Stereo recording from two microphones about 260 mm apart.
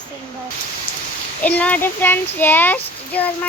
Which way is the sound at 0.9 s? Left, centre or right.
Left.